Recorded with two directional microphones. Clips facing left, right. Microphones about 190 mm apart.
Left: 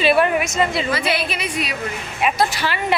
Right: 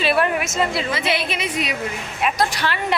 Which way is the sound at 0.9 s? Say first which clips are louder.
Left 1 dB; 20° right (ahead or behind).